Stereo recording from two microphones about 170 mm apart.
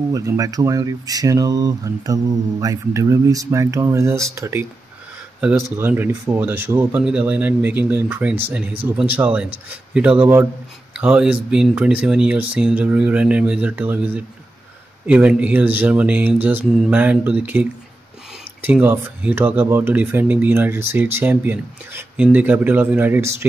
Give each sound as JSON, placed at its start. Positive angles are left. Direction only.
{"t": 0.1, "sound": "speech", "side_deg": -20}
{"t": 5.8, "sound": "speech", "side_deg": -10}